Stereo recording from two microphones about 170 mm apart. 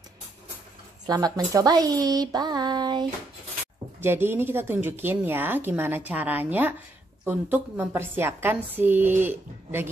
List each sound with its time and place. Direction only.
1.0 s speech: 20° right (ahead or behind)
4.0 s speech: 15° right (ahead or behind)